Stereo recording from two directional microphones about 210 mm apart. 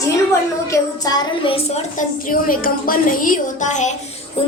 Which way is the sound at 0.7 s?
20° left (ahead or behind).